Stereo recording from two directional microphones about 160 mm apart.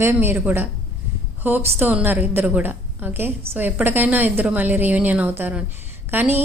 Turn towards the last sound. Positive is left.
turn(degrees=-10)  # may be behind; listen again after turning